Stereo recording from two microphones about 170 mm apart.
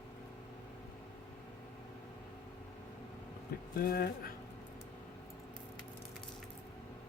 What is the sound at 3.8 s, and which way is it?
Speech, 60° left (ahead or behind).